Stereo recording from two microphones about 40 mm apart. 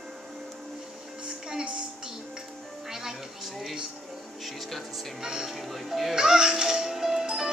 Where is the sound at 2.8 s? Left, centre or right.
Centre.